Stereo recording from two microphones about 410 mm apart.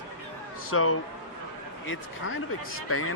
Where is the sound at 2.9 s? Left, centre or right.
Left.